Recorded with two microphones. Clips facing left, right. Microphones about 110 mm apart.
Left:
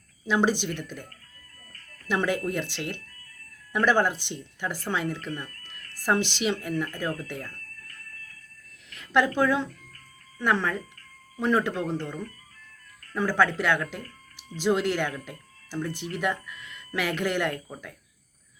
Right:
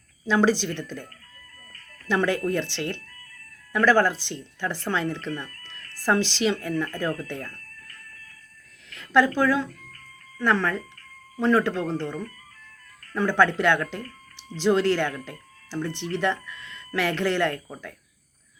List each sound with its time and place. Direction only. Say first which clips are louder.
0.3 s speech: right 3 dB; 15° left (ahead or behind)
2.0 s speech: right 3 dB; 10° left (ahead or behind)
8.9 s speech: right 3 dB; 20° left (ahead or behind)
13.1 s speech: right 3 dB; 5° left (ahead or behind)